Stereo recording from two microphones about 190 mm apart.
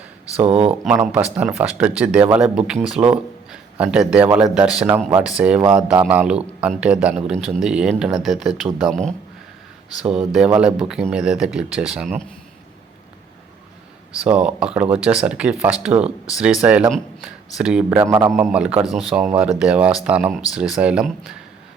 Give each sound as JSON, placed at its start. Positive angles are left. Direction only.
{"t": 0.5, "sound": "speech", "side_deg": -5}
{"t": 14.2, "sound": "speech", "side_deg": -5}
{"t": 17.8, "sound": "speech", "side_deg": -15}